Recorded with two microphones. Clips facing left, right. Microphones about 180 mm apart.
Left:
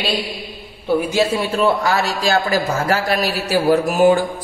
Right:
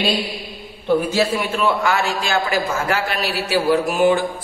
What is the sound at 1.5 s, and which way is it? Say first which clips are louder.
A man's voice: left 2 dB; 35° left (ahead or behind).